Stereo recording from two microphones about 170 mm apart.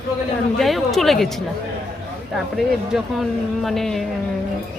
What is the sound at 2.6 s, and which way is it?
Speech, centre (ahead or behind).